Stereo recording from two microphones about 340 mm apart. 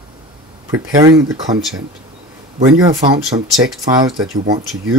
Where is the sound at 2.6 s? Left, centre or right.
Centre.